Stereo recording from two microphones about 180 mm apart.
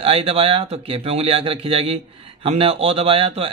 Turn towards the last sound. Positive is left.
turn(degrees=-30)  # may be behind; listen again after turning